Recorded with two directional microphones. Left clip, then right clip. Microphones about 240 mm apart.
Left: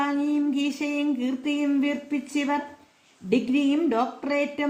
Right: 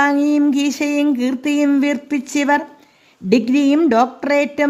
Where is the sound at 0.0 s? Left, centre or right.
Right.